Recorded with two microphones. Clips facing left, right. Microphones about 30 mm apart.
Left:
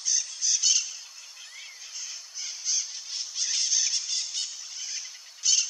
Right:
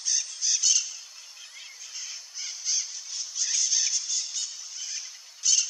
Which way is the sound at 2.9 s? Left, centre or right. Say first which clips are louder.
Left 1 dB; left.